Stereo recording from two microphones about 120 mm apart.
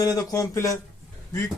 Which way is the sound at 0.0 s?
30° left (ahead or behind).